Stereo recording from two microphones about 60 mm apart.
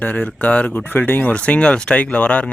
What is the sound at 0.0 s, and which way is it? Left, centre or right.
Speech, left.